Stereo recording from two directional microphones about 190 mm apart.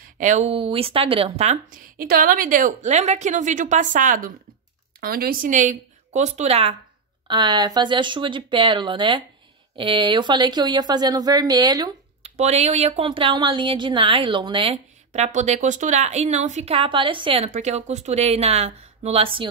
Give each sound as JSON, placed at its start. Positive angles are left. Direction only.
{"t": 0.0, "sound": "speech", "side_deg": -40}
{"t": 12.2, "sound": "speech", "side_deg": -35}